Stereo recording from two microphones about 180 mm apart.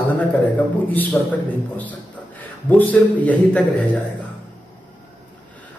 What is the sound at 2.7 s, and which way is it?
A man's voice, 10° left (ahead or behind).